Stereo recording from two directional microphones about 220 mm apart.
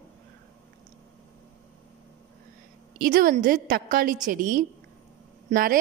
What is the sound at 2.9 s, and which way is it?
A woman's voice, 40° right (ahead or behind).